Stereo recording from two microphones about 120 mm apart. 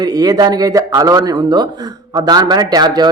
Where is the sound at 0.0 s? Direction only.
30° right (ahead or behind).